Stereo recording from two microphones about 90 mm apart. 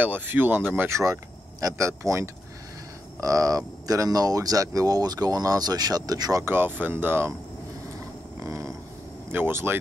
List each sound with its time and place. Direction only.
0.0 s speech: 20° right (ahead or behind)
0.8 s speech: 35° right (ahead or behind)
6.4 s speech: 25° right (ahead or behind)
8.5 s a sound: 35° right (ahead or behind)
9.3 s speech: 25° right (ahead or behind)